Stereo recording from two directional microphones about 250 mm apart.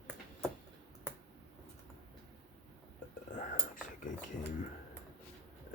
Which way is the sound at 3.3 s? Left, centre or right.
Left.